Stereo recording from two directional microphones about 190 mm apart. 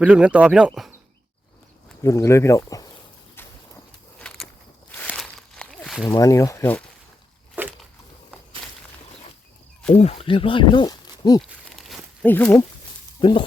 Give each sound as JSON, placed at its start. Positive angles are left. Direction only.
{"t": 0.0, "sound": "speech", "side_deg": -5}
{"t": 2.0, "sound": "speech", "side_deg": 15}
{"t": 4.2, "sound": "walk", "side_deg": 5}
{"t": 6.1, "sound": "speech", "side_deg": 15}
{"t": 7.6, "sound": "a sound", "side_deg": -10}
{"t": 10.0, "sound": "speech", "side_deg": 30}
{"t": 11.8, "sound": "a sound", "side_deg": 0}
{"t": 12.3, "sound": "speech", "side_deg": 10}
{"t": 13.1, "sound": "speech", "side_deg": 25}